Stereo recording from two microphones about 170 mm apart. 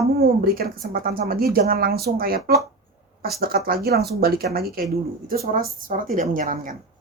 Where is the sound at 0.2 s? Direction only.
60° right (ahead or behind).